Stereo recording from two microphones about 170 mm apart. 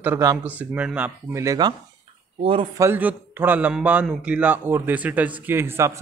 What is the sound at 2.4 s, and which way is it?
Speech, 35° right (ahead or behind).